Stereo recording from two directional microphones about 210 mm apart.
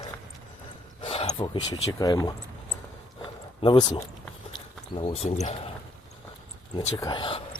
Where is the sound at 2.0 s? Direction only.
20° left (ahead or behind).